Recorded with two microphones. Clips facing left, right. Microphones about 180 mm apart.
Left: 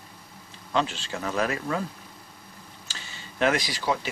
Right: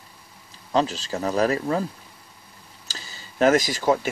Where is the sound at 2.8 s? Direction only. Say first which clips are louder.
Right 3 dB; 40° right (ahead or behind).